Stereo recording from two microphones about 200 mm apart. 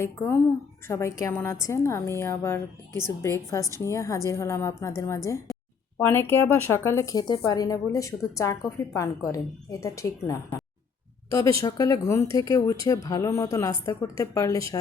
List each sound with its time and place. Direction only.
0.0 s speech: 15° left (ahead or behind)